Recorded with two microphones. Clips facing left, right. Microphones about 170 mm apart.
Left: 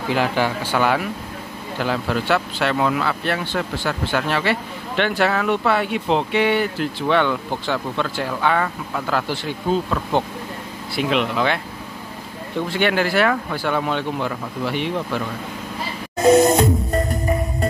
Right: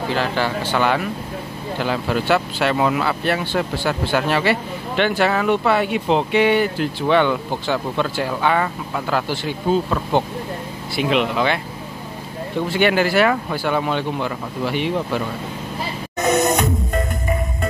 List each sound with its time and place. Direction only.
0.1 s a man's voice: 15° left (ahead or behind); by 11.6 s centre (ahead or behind)
12.7 s speech: 5° right (ahead or behind)
16.2 s music: 30° left (ahead or behind)